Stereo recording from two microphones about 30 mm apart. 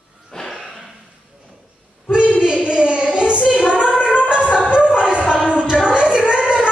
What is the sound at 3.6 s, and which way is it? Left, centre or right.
Child singing, left.